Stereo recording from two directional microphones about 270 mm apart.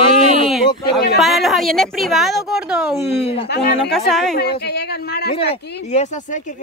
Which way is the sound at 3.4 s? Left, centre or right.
Left.